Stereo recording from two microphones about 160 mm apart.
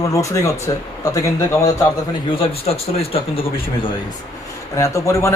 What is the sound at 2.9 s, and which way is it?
Speech, 35° left (ahead or behind).